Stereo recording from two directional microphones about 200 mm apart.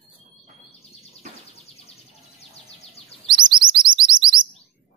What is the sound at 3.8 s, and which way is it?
Chirp, 25° right (ahead or behind).